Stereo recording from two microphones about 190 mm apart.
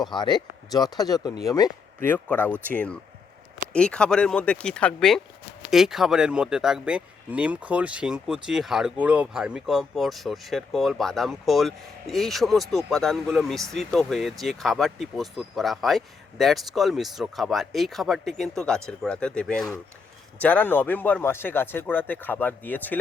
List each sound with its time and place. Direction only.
0.1 s speech: 25° left (ahead or behind)